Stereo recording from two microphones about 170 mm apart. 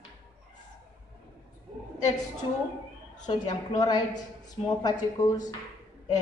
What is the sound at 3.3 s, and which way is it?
A woman's voice, 25° left (ahead or behind).